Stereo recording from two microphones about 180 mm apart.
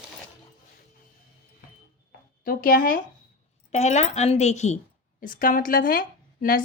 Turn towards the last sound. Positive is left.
turn(degrees=50)  # may be behind; listen again after turning